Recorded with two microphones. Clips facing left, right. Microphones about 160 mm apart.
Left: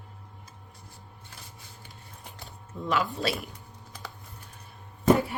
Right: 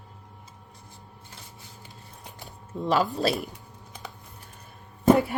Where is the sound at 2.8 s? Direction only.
35° right (ahead or behind).